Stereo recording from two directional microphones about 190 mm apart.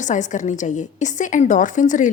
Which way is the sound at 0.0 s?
40° left (ahead or behind).